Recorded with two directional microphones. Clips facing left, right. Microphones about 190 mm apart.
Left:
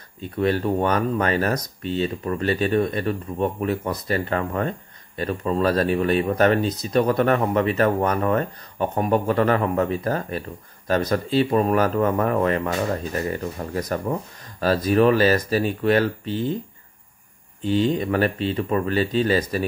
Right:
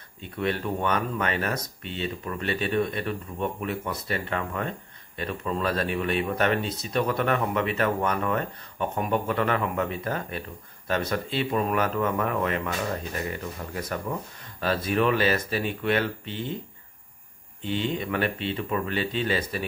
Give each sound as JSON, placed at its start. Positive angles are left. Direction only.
{"t": 0.2, "sound": "speech", "side_deg": 35}
{"t": 17.6, "sound": "speech", "side_deg": 40}